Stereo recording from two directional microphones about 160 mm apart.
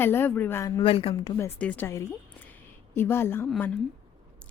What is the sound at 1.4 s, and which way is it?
A woman's voice, 10° left (ahead or behind).